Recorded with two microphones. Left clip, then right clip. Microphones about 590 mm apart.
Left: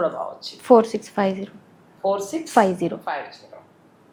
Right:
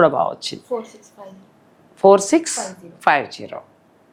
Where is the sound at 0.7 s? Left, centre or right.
Left.